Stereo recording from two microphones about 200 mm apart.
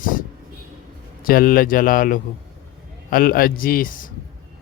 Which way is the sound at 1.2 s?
45° left (ahead or behind).